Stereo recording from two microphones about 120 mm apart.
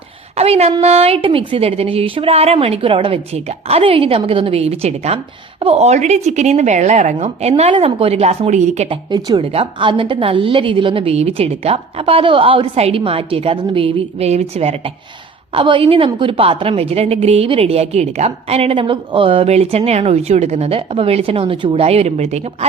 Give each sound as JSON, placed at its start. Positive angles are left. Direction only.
{"t": 0.3, "sound": "a sound", "side_deg": -60}
{"t": 0.8, "sound": "a woman's voice", "side_deg": -60}
{"t": 3.3, "sound": "a woman's voice", "side_deg": -55}
{"t": 7.7, "sound": "a woman's voice", "side_deg": -50}
{"t": 8.9, "sound": "speech", "side_deg": -40}
{"t": 9.4, "sound": "a woman's voice", "side_deg": -55}
{"t": 15.5, "sound": "a woman's voice", "side_deg": -45}